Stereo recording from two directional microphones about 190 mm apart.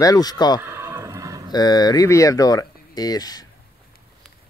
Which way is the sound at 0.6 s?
15° right (ahead or behind).